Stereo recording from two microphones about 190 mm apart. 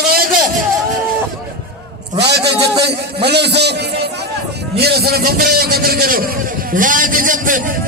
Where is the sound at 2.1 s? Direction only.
60° right (ahead or behind).